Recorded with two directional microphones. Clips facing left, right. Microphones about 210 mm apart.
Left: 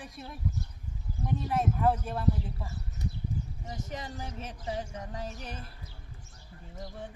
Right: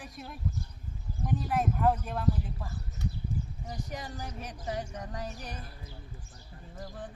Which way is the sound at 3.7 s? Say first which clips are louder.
Left 1 dB; 25° left (ahead or behind).